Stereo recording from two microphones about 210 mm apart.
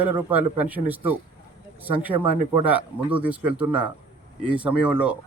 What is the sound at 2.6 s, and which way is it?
A man's voice, 5° right (ahead or behind).